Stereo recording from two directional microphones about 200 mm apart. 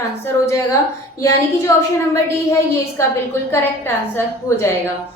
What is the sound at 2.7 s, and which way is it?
Child singing, 15° left (ahead or behind).